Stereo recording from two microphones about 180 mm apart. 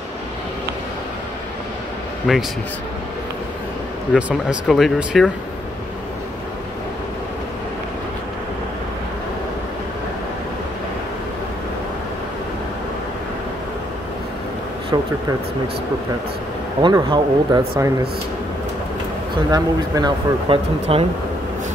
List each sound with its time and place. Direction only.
2.3 s speech: centre (ahead or behind)
4.3 s speech: 5° right (ahead or behind)
16.8 s speech: 25° right (ahead or behind)
19.5 s speech: 20° right (ahead or behind)